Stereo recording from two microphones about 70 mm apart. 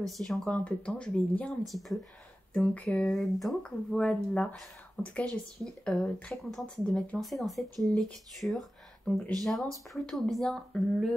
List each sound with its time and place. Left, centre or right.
0.0 s speech: centre
0.5 s speech: centre
1.6 s speech: centre
2.5 s speech: centre
3.1 s speech: centre
3.6 s speech: centre